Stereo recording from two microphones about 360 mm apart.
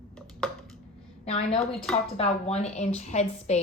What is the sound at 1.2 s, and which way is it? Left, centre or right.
A woman's voice, centre.